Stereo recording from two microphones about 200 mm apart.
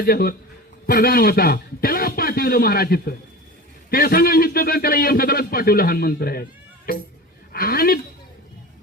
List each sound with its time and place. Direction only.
0.0 s a man's voice: 50° left (ahead or behind)